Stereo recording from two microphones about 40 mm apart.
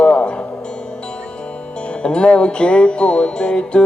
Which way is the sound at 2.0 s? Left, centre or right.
Left.